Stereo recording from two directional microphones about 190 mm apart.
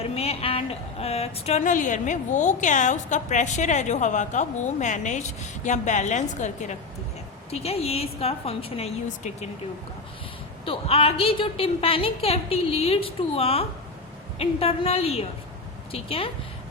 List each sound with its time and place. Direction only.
0.0 s a woman's voice: 30° left (ahead or behind)
10.7 s a woman's voice: 30° left (ahead or behind)